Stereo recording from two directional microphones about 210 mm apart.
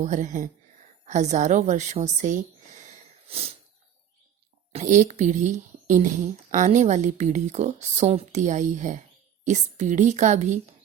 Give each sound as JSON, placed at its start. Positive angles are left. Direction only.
{"t": 0.0, "sound": "a woman's voice", "side_deg": -35}
{"t": 4.7, "sound": "speech", "side_deg": -35}